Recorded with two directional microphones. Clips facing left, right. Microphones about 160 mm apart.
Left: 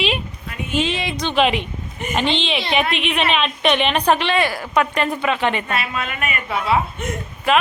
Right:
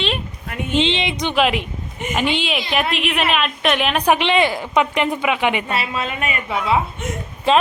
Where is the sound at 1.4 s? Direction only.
5° right (ahead or behind).